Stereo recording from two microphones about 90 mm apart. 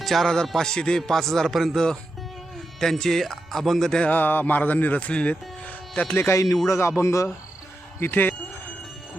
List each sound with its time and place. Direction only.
0.0 s a man's voice: centre (ahead or behind)
4.1 s a man's voice: 20° left (ahead or behind)
7.9 s speech: 25° left (ahead or behind)